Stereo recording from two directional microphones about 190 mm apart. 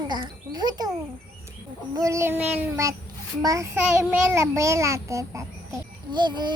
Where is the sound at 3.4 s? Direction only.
15° right (ahead or behind).